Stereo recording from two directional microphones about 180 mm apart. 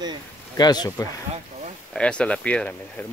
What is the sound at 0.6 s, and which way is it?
Speech, 20° left (ahead or behind).